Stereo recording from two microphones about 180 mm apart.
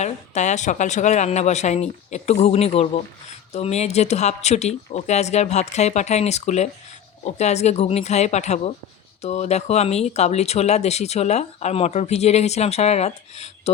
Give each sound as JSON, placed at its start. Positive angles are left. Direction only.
{"t": 0.0, "sound": "speech", "side_deg": 40}